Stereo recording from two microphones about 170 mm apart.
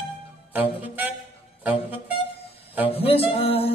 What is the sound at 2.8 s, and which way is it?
Music, 35° left (ahead or behind).